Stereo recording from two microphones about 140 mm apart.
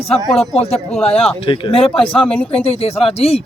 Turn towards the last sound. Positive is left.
turn(degrees=45)  # may be behind; listen again after turning